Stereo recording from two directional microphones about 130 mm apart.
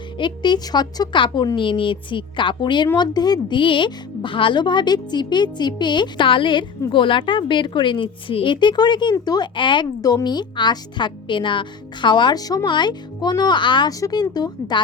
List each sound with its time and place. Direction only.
0.2 s a woman's voice: 35° left (ahead or behind)